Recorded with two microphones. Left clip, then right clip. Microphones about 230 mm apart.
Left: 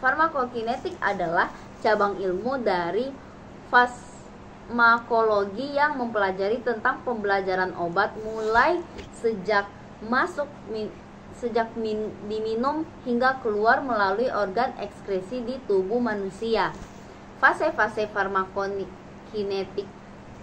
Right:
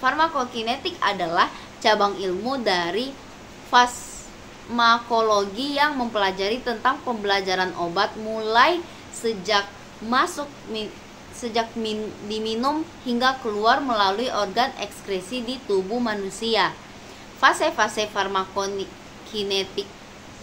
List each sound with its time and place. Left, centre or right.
0.0 s a woman's voice: centre
4.7 s a woman's voice: centre